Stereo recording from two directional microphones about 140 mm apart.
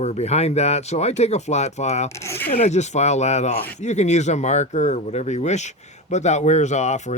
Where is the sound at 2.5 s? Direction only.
55° left (ahead or behind).